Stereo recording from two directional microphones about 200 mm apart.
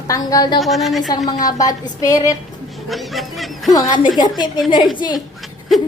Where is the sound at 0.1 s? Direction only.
15° left (ahead or behind).